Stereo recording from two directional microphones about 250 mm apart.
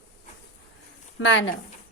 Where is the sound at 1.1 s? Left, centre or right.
Left.